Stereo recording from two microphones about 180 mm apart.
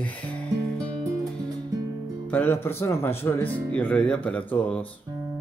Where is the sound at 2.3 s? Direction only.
10° left (ahead or behind).